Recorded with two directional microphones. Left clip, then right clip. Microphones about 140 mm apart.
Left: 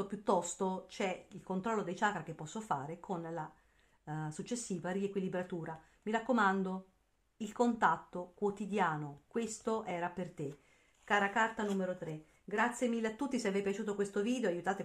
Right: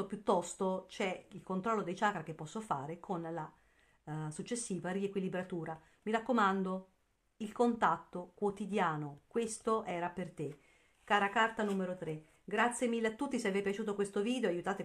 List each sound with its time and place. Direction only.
0.1 s speech: 20° right (ahead or behind)
11.4 s speech: 35° right (ahead or behind)